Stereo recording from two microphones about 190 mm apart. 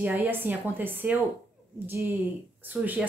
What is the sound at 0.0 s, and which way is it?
Speech, 10° right (ahead or behind).